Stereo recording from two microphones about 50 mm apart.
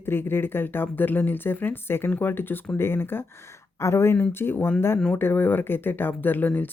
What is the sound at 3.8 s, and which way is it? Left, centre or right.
Speech, left.